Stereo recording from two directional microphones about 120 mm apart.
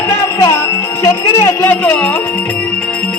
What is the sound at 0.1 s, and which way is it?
Music, 20° left (ahead or behind).